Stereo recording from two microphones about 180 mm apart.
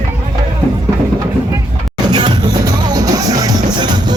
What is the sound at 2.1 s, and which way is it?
Music, 25° right (ahead or behind).